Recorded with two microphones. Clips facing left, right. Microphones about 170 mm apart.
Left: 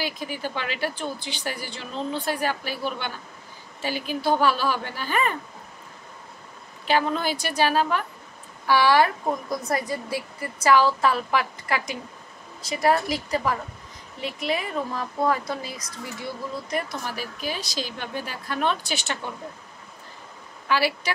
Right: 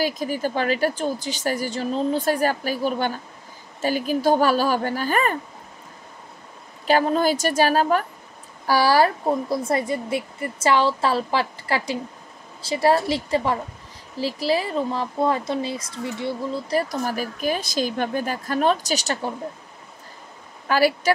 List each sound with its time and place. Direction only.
0.0 s a woman's voice: 45° right (ahead or behind)
6.9 s a woman's voice: 40° right (ahead or behind)
20.6 s a woman's voice: 45° right (ahead or behind)